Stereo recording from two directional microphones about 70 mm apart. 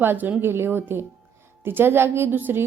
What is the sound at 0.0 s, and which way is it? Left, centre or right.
A woman's voice, right.